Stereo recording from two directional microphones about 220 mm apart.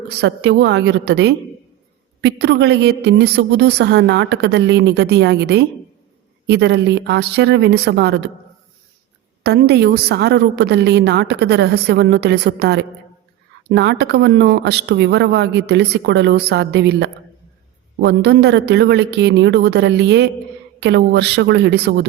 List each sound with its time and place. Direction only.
0.2 s speech: 50° right (ahead or behind)
9.4 s speech: 45° right (ahead or behind)